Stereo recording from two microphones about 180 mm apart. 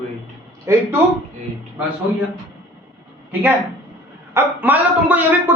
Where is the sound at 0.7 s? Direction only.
15° right (ahead or behind).